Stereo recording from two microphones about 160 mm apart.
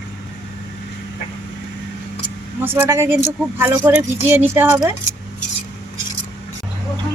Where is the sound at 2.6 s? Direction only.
15° right (ahead or behind).